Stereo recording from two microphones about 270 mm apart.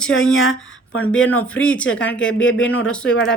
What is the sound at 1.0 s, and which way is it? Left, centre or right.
Speech, left.